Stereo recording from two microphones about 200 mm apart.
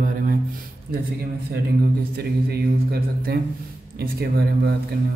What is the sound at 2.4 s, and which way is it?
Mantra, 50° right (ahead or behind).